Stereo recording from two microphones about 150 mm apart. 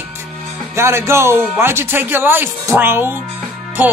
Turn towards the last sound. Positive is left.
turn(degrees=-10)  # may be behind; listen again after turning